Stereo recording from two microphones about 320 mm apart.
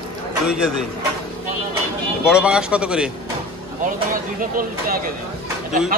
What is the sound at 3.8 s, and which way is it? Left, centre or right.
Speech, right.